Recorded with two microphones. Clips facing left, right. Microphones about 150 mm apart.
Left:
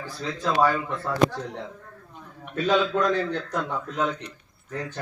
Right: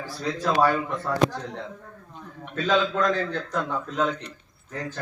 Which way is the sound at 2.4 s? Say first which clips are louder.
Left 1 dB; 5° left (ahead or behind).